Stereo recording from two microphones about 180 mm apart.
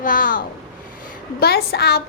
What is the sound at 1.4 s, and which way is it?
Speech, 60° left (ahead or behind).